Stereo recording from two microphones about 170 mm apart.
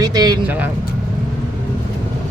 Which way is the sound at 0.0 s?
25° right (ahead or behind).